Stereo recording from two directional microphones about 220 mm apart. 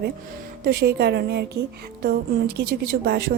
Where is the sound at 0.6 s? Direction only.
45° right (ahead or behind).